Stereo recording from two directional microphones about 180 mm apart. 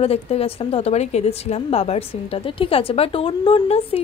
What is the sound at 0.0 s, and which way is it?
A woman's voice, 35° left (ahead or behind).